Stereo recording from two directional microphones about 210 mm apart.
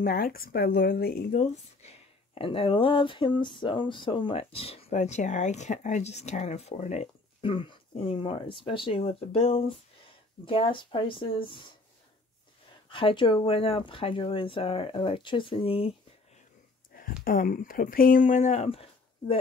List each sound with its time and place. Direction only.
0.0 s speech: 45° left (ahead or behind); by 11.5 s 25° left (ahead or behind)
12.9 s speech: 25° left (ahead or behind)
16.9 s speech: 40° left (ahead or behind); by 19.3 s 25° left (ahead or behind)